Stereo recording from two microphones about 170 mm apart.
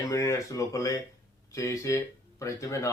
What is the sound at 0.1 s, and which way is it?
Speech, 20° left (ahead or behind).